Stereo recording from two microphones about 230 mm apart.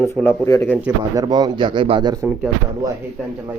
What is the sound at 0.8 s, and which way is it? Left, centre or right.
A man's voice, centre.